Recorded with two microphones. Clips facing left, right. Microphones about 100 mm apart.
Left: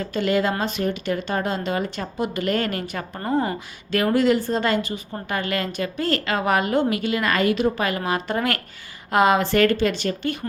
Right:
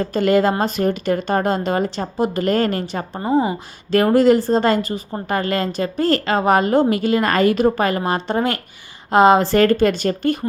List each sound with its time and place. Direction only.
0.0 s a woman's voice: 40° right (ahead or behind)
3.3 s speech: 10° right (ahead or behind)
3.9 s a woman's voice: 40° right (ahead or behind)